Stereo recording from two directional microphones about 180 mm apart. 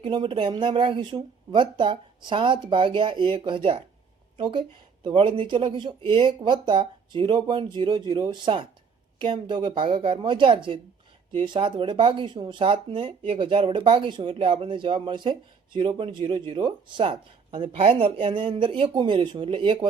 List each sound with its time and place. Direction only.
0.0 s speech: 30° right (ahead or behind)